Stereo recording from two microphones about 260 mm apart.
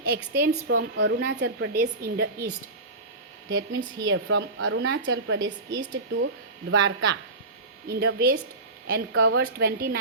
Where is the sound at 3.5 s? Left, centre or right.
Right.